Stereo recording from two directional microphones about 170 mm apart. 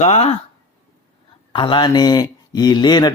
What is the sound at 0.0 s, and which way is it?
Speech, 35° left (ahead or behind).